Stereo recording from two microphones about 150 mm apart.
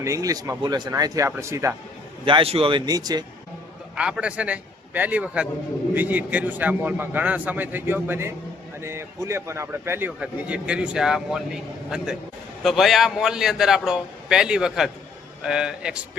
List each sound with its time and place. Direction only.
0.0 s speech: 20° right (ahead or behind)
2.2 s speech: 35° right (ahead or behind)
3.9 s a man's voice: 5° right (ahead or behind)
12.6 s a man's voice: centre (ahead or behind)